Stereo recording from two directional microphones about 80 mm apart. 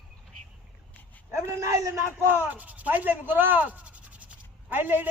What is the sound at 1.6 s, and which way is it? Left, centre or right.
Speech, right.